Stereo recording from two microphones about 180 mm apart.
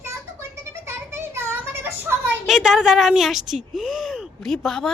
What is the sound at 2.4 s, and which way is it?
Speech, centre (ahead or behind).